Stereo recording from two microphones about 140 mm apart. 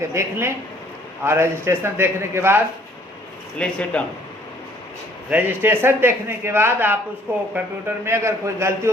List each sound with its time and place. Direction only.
0.1 s a man's voice: 20° right (ahead or behind)
3.6 s a man's voice: 10° left (ahead or behind)
5.3 s a man's voice: 15° right (ahead or behind)